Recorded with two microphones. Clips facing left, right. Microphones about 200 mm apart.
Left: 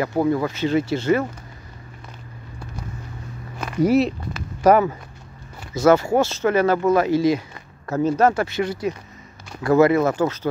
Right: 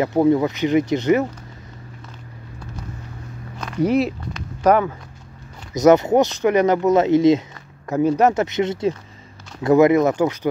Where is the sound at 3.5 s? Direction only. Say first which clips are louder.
Left 1 dB; 5° left (ahead or behind).